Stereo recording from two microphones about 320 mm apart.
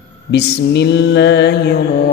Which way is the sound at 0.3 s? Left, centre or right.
Left.